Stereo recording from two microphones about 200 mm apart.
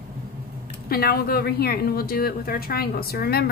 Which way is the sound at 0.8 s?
50° left (ahead or behind).